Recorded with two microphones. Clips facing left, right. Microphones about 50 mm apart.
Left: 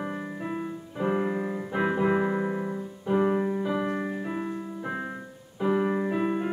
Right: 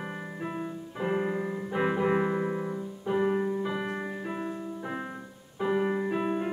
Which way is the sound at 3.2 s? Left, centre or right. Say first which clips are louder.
Left 2 dB; centre.